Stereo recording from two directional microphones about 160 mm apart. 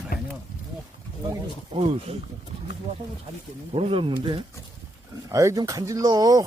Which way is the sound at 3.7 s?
35° right (ahead or behind).